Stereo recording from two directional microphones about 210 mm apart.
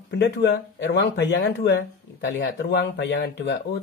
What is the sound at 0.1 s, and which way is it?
Speech, 55° left (ahead or behind).